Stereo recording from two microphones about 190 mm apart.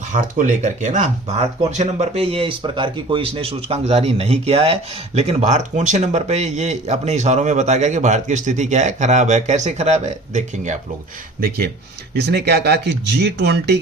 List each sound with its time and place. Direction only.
0.1 s speech: 40° right (ahead or behind)
11.3 s speech: 55° right (ahead or behind)